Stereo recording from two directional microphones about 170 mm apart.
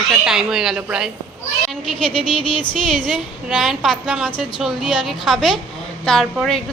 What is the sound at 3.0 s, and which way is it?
Speech, 5° left (ahead or behind).